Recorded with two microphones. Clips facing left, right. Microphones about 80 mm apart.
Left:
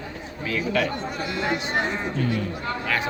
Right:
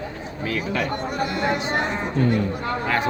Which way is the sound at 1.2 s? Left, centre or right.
Right.